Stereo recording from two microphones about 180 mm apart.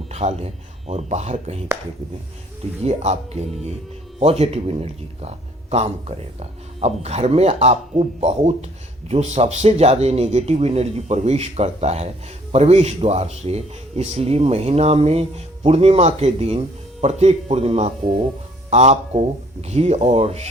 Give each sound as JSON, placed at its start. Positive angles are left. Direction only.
{"t": 0.1, "sound": "speech", "side_deg": -35}
{"t": 2.8, "sound": "speech", "side_deg": -35}